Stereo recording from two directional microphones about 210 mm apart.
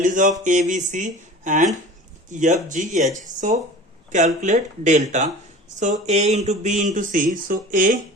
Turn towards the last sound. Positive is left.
turn(degrees=-40)  # may be behind; listen again after turning